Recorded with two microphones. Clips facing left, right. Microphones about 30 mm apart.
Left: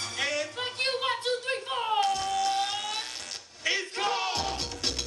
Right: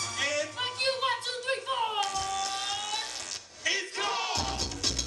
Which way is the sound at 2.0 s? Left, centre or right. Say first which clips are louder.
Left 4 dB; left.